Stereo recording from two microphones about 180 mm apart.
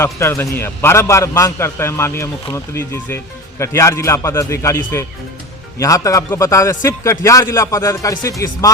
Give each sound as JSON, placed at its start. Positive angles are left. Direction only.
{"t": 0.0, "sound": "a man's voice", "side_deg": 15}